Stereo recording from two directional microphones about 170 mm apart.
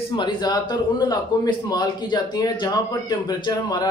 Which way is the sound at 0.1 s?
25° left (ahead or behind).